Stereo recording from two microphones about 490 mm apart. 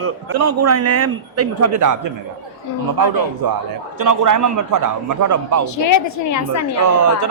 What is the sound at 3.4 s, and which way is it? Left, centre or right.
A man's voice, right.